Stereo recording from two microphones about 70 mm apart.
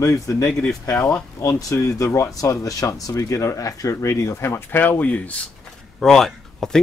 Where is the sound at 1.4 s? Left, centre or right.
Left.